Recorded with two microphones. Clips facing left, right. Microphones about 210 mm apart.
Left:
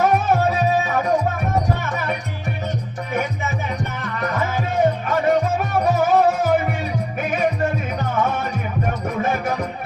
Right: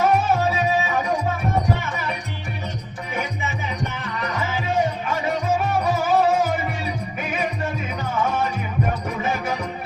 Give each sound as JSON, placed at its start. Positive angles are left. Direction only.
{"t": 0.0, "sound": "music", "side_deg": 55}
{"t": 3.9, "sound": "music", "side_deg": 50}